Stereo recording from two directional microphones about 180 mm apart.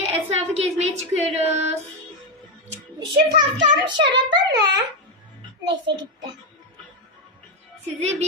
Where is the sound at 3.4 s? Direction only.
25° right (ahead or behind).